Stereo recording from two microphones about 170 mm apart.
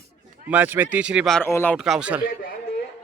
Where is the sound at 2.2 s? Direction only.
55° left (ahead or behind).